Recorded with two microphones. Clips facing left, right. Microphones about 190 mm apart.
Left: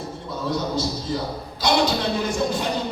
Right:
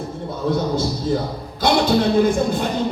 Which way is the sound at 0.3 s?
55° right (ahead or behind).